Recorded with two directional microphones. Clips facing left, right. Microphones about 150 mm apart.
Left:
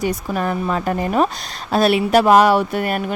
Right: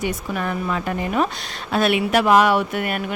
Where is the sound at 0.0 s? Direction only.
35° left (ahead or behind).